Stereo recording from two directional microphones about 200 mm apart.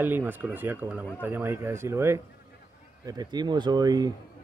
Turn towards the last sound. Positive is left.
turn(degrees=-20)  # may be behind; listen again after turning